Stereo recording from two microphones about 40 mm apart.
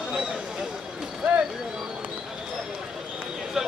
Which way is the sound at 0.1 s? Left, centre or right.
Centre.